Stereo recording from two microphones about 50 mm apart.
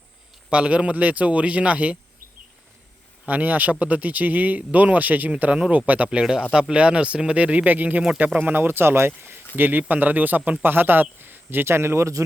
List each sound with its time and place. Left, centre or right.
0.5 s speech: right
3.2 s speech: right
6.5 s speech: centre; by 12.2 s right